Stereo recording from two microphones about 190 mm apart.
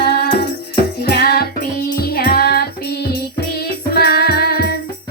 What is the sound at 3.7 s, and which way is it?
Music, 55° left (ahead or behind).